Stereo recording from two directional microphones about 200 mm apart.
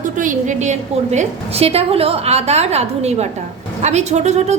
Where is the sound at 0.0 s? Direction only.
40° right (ahead or behind).